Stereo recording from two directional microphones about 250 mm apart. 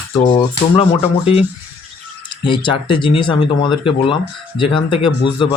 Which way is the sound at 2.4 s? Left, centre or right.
Centre.